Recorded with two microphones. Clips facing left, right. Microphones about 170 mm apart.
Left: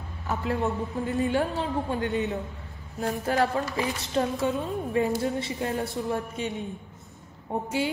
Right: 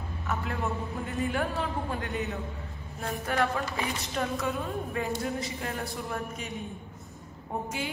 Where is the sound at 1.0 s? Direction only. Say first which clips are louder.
Left 5 dB; 30° left (ahead or behind).